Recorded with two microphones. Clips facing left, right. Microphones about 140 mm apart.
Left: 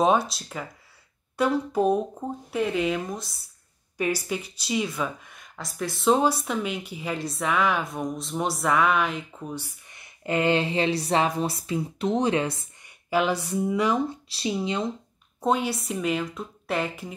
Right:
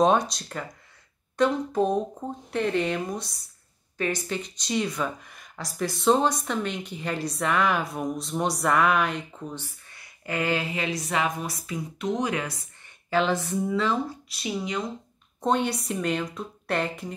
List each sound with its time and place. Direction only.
0.0 s speech: 5° left (ahead or behind)
9.9 s speech: 25° left (ahead or behind)
12.8 s speech: 10° left (ahead or behind)
14.3 s speech: 30° left (ahead or behind)
15.4 s speech: 5° left (ahead or behind)